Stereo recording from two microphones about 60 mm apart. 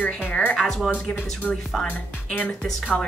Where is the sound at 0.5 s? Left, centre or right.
Centre.